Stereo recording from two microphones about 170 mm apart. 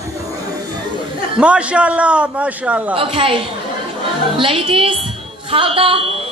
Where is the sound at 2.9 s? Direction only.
30° right (ahead or behind).